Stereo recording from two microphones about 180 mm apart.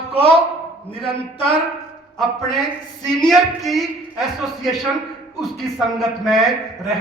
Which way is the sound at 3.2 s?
Centre (ahead or behind).